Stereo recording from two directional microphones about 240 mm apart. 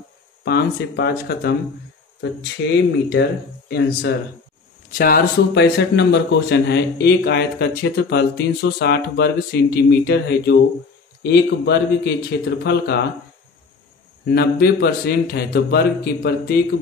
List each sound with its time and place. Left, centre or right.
0.5 s speech: left
2.6 s a man's voice: left
14.2 s speech: left